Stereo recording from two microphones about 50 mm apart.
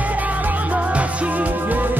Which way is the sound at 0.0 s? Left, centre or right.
Right.